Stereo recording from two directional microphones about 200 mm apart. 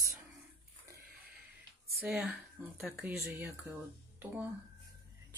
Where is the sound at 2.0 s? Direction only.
Centre (ahead or behind).